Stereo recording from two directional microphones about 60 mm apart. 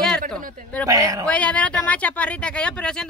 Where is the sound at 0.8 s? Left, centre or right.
Right.